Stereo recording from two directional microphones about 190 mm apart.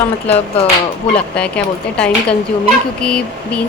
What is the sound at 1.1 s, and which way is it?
Speech, 5° left (ahead or behind).